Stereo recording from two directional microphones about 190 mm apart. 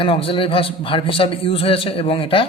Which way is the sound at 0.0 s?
30° left (ahead or behind).